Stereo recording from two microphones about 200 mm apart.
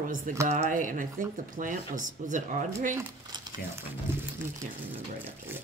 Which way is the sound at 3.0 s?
15° right (ahead or behind).